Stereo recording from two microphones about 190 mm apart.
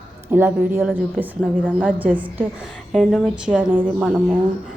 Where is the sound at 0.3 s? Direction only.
10° right (ahead or behind).